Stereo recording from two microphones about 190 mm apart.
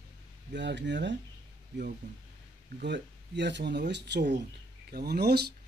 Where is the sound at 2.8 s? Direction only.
65° right (ahead or behind).